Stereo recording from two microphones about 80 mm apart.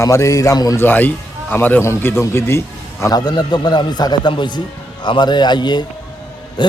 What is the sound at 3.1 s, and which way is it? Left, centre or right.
A man's voice, left.